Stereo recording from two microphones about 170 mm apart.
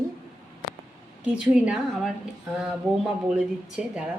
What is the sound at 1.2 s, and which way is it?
A woman's voice, 5° right (ahead or behind).